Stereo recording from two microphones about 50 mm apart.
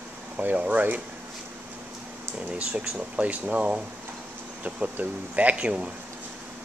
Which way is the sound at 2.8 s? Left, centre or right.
Right.